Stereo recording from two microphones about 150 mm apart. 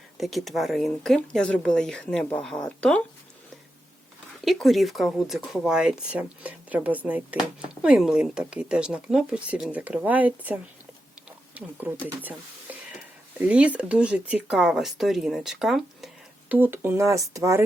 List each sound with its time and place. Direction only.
0.2 s speech: centre (ahead or behind)
4.4 s speech: centre (ahead or behind)
11.3 s a sound: 10° right (ahead or behind)
13.4 s speech: 10° right (ahead or behind)
16.5 s speech: 10° right (ahead or behind)